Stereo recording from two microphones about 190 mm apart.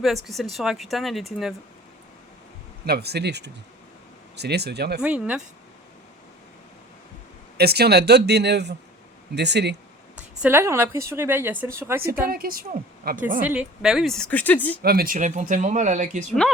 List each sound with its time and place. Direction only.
0.0 s speech: centre (ahead or behind)
2.8 s speech: 55° right (ahead or behind)
5.0 s speech: 5° right (ahead or behind)
7.5 s speech: 55° right (ahead or behind)
10.4 s speech: 15° right (ahead or behind)
12.3 s a woman's voice: 50° right (ahead or behind)
13.4 s speech: 5° right (ahead or behind)
14.8 s speech: 55° right (ahead or behind)